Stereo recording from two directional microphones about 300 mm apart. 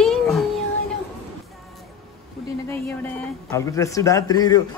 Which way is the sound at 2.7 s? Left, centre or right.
Centre.